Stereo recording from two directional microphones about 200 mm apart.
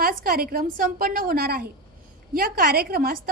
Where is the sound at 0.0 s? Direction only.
45° right (ahead or behind).